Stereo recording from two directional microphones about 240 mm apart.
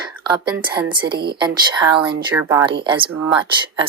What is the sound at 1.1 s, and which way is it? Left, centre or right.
Speech, right.